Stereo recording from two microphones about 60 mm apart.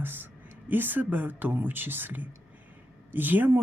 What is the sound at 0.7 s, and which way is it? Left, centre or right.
Speech, right.